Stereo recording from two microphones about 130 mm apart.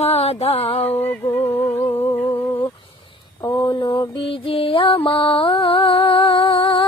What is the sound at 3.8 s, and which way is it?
Mantra, 40° left (ahead or behind).